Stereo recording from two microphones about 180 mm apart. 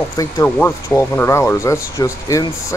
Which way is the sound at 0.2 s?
15° left (ahead or behind).